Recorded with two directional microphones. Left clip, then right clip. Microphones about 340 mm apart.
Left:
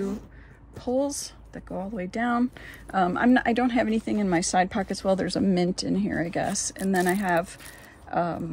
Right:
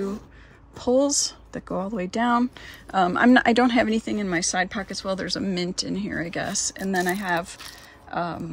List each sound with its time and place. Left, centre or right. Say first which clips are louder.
0.7 s speech: right 6 dB; centre